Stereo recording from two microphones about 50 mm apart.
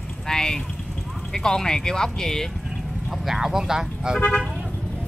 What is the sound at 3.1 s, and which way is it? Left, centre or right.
Speech, centre.